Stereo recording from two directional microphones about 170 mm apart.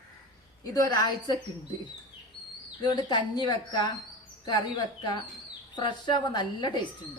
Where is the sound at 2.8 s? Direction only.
25° left (ahead or behind).